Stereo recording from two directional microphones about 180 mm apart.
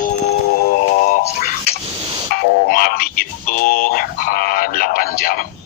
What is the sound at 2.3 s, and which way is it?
Speech, 55° left (ahead or behind).